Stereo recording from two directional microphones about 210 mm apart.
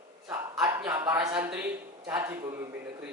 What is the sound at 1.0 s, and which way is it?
A man's voice, 5° right (ahead or behind).